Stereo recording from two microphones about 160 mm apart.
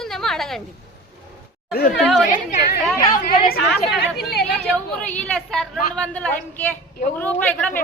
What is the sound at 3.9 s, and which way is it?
Speech, 90° left.